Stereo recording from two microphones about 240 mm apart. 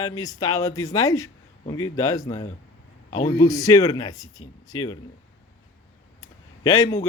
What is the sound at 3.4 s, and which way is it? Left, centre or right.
Speech, centre.